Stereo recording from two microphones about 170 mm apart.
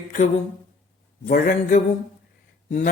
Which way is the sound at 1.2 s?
55° left (ahead or behind).